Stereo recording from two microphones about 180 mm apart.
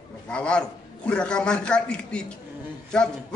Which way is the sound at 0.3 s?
5° left (ahead or behind).